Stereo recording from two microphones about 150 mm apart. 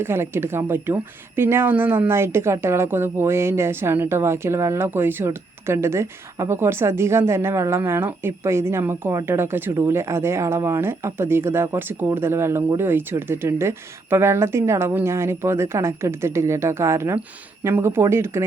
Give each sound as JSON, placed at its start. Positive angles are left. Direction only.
{"t": 0.0, "sound": "speech", "side_deg": -15}